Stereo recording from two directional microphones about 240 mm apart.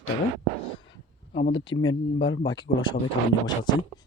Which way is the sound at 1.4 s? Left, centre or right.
Left.